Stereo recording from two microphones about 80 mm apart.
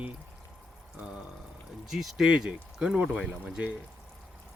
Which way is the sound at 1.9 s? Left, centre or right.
Centre.